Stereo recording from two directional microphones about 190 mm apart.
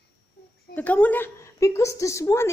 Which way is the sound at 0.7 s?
10° left (ahead or behind).